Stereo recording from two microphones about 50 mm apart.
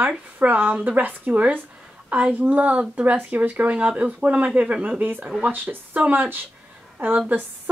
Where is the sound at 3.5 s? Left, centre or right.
Right.